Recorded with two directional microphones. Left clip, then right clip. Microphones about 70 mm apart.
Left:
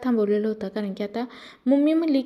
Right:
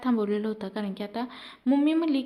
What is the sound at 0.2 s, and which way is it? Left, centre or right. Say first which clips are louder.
A woman's voice: left 6 dB; centre.